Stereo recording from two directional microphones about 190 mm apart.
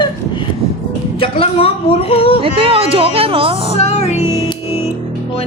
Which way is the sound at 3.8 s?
35° left (ahead or behind).